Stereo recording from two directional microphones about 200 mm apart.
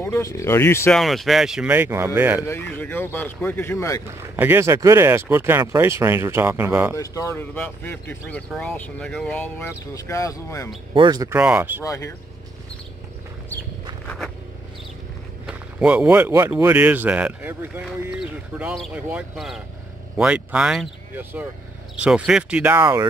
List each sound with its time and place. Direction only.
0.0 s speech: 15° left (ahead or behind)
0.9 s speech: centre (ahead or behind)
2.4 s speech: 10° left (ahead or behind)
4.4 s speech: 10° right (ahead or behind)
7.0 s speech: 15° left (ahead or behind)
11.0 s speech: 20° right (ahead or behind)
11.8 s speech: 15° left (ahead or behind)
14.0 s vehicle: centre (ahead or behind)
15.4 s speech: 5° right (ahead or behind)